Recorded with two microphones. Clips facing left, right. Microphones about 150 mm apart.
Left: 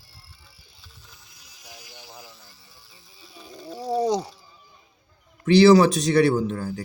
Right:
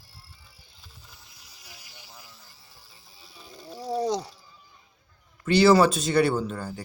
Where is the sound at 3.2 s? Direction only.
Centre (ahead or behind).